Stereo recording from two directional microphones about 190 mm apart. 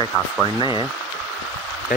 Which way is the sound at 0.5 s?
25° left (ahead or behind).